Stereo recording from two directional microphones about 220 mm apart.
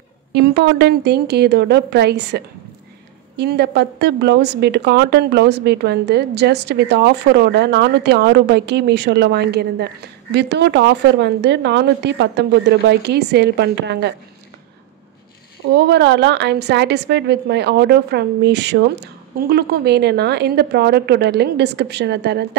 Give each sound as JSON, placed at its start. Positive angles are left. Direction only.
{"t": 0.3, "sound": "a woman's voice", "side_deg": -50}
{"t": 15.7, "sound": "a woman's voice", "side_deg": -50}